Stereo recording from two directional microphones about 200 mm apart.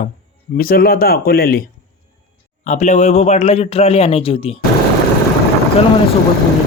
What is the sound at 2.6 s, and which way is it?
Speech, 35° left (ahead or behind).